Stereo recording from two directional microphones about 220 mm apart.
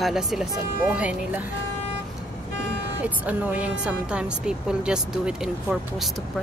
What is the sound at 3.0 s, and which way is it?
A woman's voice, 5° right (ahead or behind).